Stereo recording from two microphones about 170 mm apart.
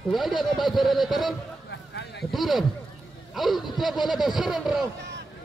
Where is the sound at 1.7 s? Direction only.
90° left.